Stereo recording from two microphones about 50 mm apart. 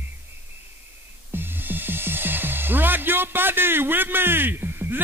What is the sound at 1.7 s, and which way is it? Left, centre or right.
Speech, right.